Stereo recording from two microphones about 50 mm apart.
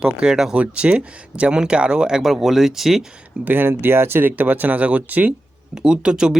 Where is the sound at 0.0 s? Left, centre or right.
Centre.